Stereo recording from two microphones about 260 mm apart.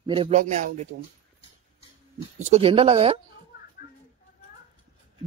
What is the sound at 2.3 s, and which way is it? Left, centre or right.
Speech, right.